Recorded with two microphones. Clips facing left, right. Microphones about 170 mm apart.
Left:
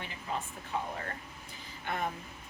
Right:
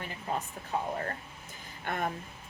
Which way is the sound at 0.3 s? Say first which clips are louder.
Right 3 dB; 40° right (ahead or behind).